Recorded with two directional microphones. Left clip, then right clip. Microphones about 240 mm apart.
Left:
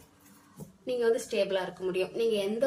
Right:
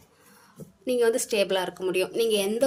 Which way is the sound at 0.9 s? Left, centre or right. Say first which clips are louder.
Right 5 dB; right.